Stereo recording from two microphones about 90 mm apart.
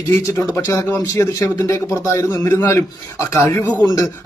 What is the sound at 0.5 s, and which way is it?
Speech, 30° left (ahead or behind).